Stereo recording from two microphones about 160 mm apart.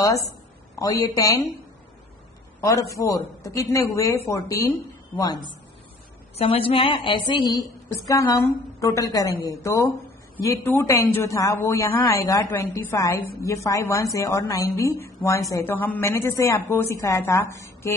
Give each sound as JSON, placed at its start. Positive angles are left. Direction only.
{"t": 0.7, "sound": "a woman's voice", "side_deg": 20}
{"t": 2.6, "sound": "a woman's voice", "side_deg": 20}
{"t": 6.3, "sound": "a woman's voice", "side_deg": 35}